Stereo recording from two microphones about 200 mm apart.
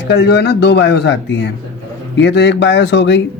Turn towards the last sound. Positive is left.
turn(degrees=60)  # may be behind; listen again after turning